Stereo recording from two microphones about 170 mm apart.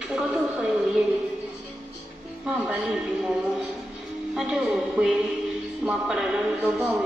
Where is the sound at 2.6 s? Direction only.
5° right (ahead or behind).